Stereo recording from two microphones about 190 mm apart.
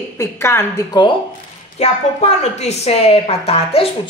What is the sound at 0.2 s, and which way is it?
Speech, 15° left (ahead or behind).